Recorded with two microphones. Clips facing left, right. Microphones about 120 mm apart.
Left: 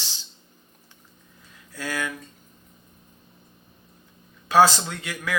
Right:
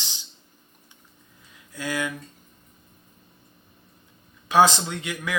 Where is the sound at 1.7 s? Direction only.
15° right (ahead or behind).